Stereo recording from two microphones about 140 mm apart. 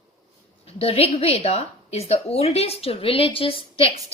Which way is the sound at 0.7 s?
45° left (ahead or behind).